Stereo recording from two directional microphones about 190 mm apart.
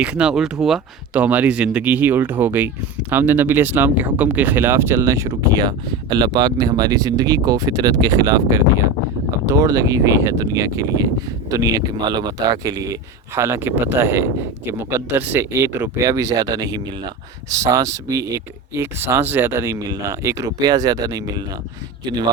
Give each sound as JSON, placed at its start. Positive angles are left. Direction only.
{"t": 0.0, "sound": "a man's voice", "side_deg": -5}